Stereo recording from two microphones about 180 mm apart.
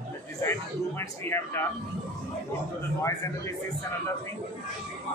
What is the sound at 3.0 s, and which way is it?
Speech, 15° left (ahead or behind).